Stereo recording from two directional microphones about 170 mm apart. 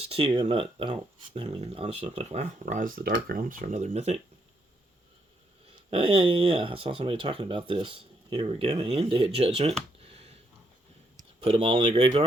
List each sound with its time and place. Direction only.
0.0 s speech: 35° right (ahead or behind)
5.9 s speech: 30° right (ahead or behind)
11.4 s speech: 35° right (ahead or behind)